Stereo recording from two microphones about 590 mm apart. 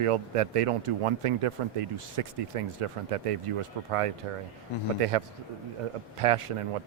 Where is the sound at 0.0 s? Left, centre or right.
Right.